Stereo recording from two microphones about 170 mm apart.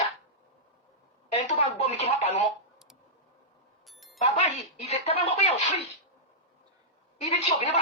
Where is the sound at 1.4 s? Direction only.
40° left (ahead or behind).